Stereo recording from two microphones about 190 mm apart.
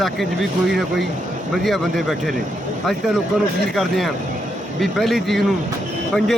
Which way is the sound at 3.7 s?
Centre (ahead or behind).